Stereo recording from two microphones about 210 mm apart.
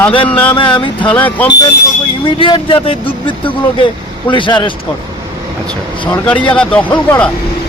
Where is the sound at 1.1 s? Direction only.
5° left (ahead or behind).